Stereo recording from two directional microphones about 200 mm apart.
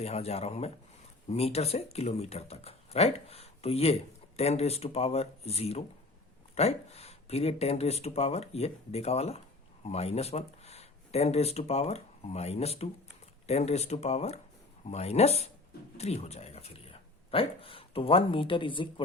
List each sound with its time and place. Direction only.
0.0 s speech: 30° left (ahead or behind)